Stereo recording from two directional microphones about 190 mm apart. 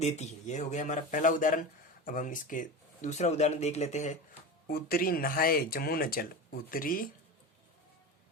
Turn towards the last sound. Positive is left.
turn(degrees=50)  # may be behind; listen again after turning